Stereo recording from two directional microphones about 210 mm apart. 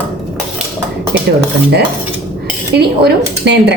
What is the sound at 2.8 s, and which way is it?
Speech, 50° right (ahead or behind).